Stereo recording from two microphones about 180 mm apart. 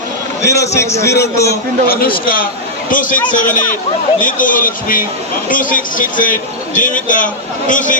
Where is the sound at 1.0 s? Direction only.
65° left (ahead or behind).